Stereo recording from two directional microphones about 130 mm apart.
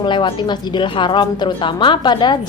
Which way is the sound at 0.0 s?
35° left (ahead or behind).